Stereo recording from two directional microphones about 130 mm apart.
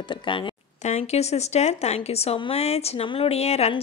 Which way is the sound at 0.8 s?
55° left (ahead or behind).